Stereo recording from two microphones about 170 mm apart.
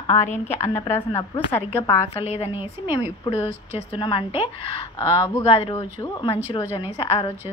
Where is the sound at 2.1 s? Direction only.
35° left (ahead or behind).